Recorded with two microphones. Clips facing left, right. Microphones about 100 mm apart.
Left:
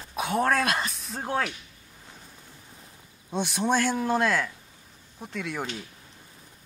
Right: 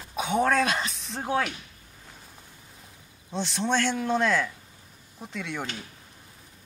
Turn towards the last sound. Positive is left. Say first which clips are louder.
# left 1 dB
turn(degrees=0)  # may be behind; listen again after turning